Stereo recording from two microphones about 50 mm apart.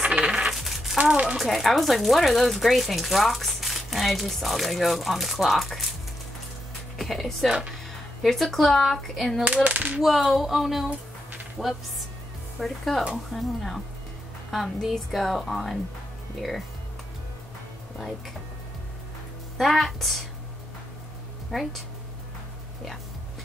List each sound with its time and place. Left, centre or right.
0.0 s coin: right
0.3 s coin: centre
0.6 s a sound: centre
1.5 s speech: centre
7.0 s speech: centre
9.4 s speech: right
9.9 s a sound: centre
11.6 s speech: centre
19.5 s speech: centre